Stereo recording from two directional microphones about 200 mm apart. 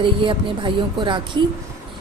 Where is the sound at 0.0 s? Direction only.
25° right (ahead or behind).